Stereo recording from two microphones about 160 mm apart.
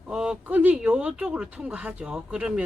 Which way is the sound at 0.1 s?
5° right (ahead or behind).